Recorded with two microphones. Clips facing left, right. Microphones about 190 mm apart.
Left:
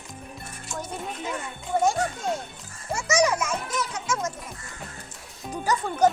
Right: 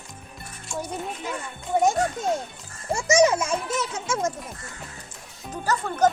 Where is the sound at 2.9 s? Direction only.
25° right (ahead or behind).